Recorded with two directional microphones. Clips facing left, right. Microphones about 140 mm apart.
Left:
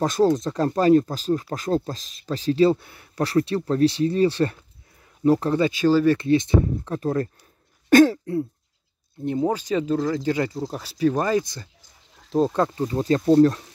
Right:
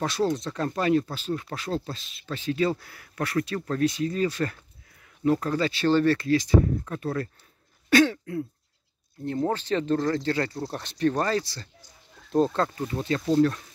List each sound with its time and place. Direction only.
0.0 s speech: 40° left (ahead or behind); by 6.1 s 10° left (ahead or behind)
6.1 s speech: 25° left (ahead or behind)
7.9 s throat clearing: 45° left (ahead or behind)
9.2 s speech: 15° left (ahead or behind)
10.5 s speech: 5° left (ahead or behind)
12.8 s speech: 35° left (ahead or behind)